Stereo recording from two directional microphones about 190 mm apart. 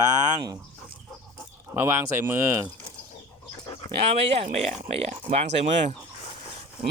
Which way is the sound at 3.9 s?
30° right (ahead or behind).